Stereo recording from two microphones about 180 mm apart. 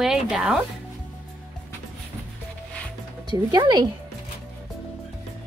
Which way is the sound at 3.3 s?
25° right (ahead or behind).